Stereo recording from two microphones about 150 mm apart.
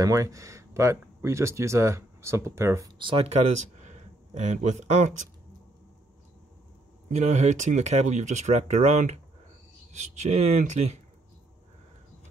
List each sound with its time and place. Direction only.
0.0 s speech: 20° right (ahead or behind)
3.0 s speech: 35° right (ahead or behind)
3.6 s speech: 50° right (ahead or behind)
7.1 s speech: 55° right (ahead or behind)